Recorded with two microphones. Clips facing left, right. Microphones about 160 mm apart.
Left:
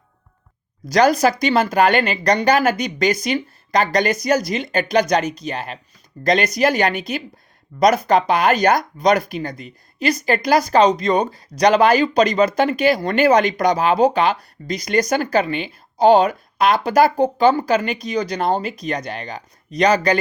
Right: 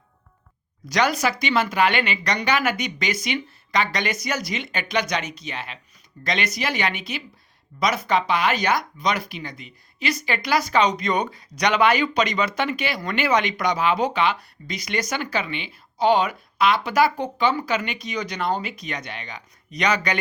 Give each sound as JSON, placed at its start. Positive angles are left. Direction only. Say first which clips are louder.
{"t": 0.9, "sound": "speech", "louder": "left 7 dB", "side_deg": 35}